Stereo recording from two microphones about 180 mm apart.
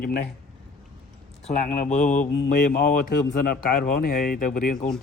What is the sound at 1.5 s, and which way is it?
Speech, 40° left (ahead or behind).